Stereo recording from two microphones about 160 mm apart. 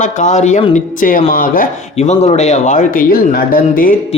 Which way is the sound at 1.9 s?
40° left (ahead or behind).